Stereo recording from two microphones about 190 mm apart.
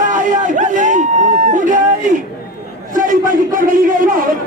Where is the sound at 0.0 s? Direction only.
40° right (ahead or behind).